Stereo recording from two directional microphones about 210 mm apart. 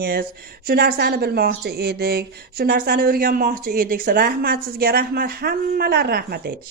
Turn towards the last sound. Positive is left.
turn(degrees=-45)  # may be behind; listen again after turning